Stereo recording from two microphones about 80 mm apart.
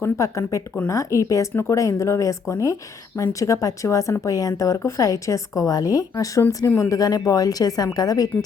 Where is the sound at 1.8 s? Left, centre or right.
Left.